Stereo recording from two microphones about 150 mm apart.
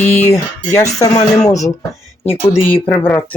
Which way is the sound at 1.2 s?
50° left (ahead or behind).